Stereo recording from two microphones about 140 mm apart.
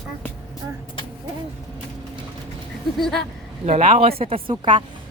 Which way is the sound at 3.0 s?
Centre (ahead or behind).